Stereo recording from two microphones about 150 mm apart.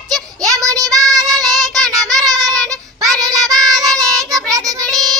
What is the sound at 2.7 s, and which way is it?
Child singing, 25° right (ahead or behind).